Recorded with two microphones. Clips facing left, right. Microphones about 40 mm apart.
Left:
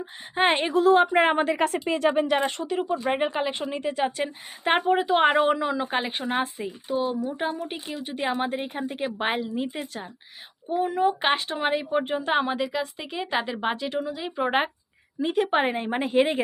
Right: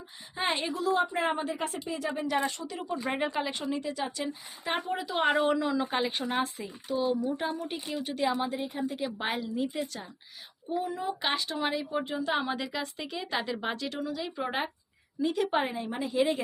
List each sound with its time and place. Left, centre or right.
0.0 s a woman's voice: left
3.1 s a woman's voice: left
10.7 s a woman's voice: left
12.5 s speech: centre
13.1 s a woman's voice: left